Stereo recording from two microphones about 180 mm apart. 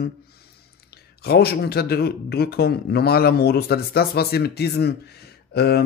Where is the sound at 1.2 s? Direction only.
60° left (ahead or behind).